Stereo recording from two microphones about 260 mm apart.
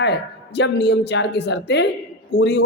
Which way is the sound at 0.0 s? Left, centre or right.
Left.